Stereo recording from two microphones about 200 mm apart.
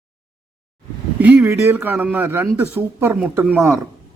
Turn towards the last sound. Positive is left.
turn(degrees=-10)  # may be behind; listen again after turning